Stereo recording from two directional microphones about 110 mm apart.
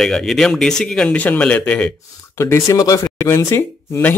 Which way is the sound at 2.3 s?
25° left (ahead or behind).